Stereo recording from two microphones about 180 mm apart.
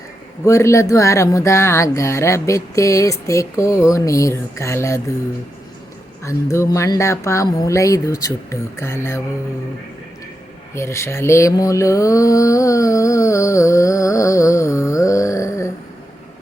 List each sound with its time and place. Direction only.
0.4 s mantra: 15° left (ahead or behind)
6.2 s mantra: 15° left (ahead or behind)
10.8 s mantra: 15° left (ahead or behind)